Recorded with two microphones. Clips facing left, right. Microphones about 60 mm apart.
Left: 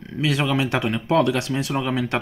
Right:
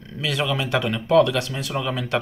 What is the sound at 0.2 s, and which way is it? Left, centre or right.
Speech, left.